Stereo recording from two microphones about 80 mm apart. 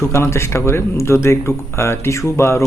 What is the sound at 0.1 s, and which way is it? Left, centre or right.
Speech, left.